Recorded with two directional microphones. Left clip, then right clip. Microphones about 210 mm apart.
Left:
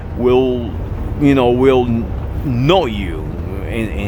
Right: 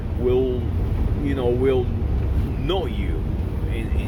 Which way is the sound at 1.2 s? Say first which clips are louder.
Left 10 dB; 35° left (ahead or behind).